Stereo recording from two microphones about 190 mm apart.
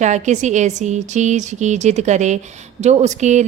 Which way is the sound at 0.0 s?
40° right (ahead or behind).